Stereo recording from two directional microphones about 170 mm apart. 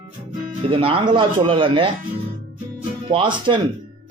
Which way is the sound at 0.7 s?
30° right (ahead or behind).